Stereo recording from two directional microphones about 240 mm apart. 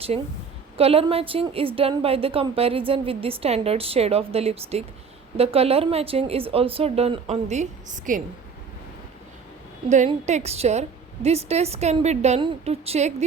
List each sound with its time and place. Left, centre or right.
0.1 s a woman's voice: right
9.9 s a woman's voice: right